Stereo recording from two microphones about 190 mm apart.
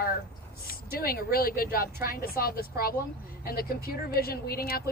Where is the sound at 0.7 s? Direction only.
50° left (ahead or behind).